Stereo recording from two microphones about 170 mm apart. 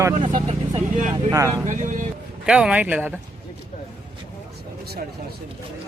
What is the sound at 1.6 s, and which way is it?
Speech, 45° right (ahead or behind).